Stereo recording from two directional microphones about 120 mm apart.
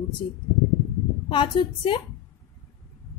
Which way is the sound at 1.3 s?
45° left (ahead or behind).